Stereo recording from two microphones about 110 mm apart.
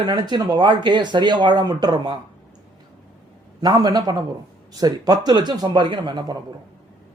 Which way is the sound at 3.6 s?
35° right (ahead or behind).